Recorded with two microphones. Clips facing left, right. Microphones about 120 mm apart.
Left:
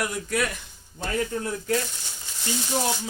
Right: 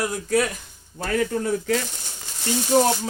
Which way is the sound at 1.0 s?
80° right.